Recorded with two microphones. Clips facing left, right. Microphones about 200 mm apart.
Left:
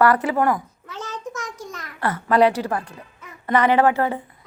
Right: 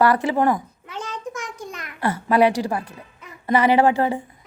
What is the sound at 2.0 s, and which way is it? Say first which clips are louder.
Speech: even; 15° right (ahead or behind).